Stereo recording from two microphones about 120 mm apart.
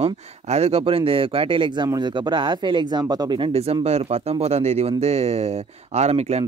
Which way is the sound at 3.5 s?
60° right (ahead or behind).